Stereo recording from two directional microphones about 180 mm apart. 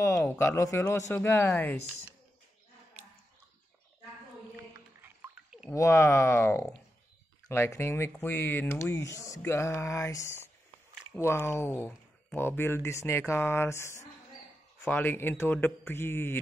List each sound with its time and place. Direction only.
0.0 s speech: 15° left (ahead or behind)
5.0 s a sound: 10° right (ahead or behind)
5.7 s speech: 15° left (ahead or behind)